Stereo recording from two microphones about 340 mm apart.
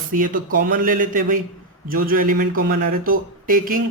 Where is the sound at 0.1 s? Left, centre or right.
Right.